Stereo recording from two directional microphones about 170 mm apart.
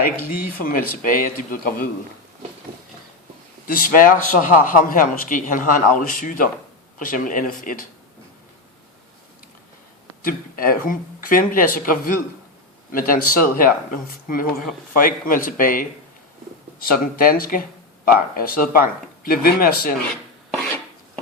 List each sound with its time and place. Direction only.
0.6 s speech: 55° left (ahead or behind)
3.7 s speech: 55° left (ahead or behind)
10.2 s speech: 55° left (ahead or behind)